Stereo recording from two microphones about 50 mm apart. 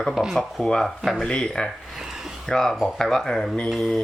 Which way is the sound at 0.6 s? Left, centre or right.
Centre.